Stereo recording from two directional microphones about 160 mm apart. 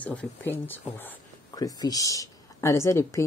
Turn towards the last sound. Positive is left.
turn(degrees=15)  # may be behind; listen again after turning